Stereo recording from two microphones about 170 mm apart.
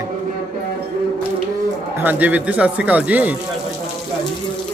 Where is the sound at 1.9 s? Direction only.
10° right (ahead or behind).